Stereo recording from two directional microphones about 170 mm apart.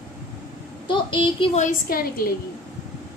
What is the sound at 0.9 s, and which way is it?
Speech, 30° left (ahead or behind).